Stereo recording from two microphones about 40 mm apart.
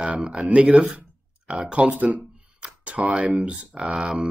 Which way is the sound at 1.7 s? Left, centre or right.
Right.